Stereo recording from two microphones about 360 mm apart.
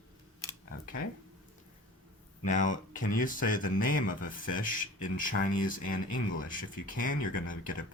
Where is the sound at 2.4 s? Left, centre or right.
Left.